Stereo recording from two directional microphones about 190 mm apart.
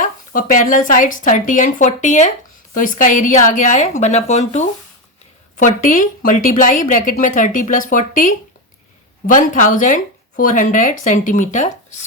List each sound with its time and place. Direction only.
0.0 s a woman's voice: 45° left (ahead or behind)